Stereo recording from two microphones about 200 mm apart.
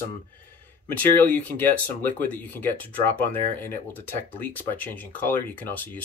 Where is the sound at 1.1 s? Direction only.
10° left (ahead or behind).